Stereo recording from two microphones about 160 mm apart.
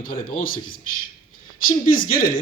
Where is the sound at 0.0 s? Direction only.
60° left (ahead or behind).